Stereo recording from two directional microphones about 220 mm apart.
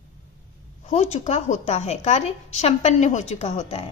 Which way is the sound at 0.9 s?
30° left (ahead or behind).